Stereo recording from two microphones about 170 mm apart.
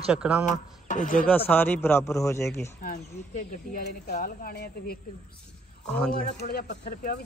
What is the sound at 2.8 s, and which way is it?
Speech, 60° left (ahead or behind).